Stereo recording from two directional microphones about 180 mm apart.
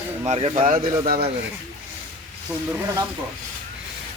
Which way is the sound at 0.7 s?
55° right (ahead or behind).